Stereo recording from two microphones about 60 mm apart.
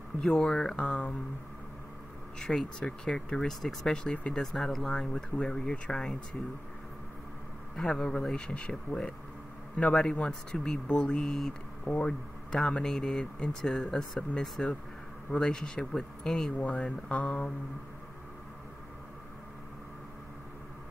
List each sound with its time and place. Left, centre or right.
0.2 s speech: centre
2.3 s speech: centre
4.3 s speech: centre
7.7 s speech: centre
11.8 s speech: left
12.1 s speech: centre
16.5 s speech: left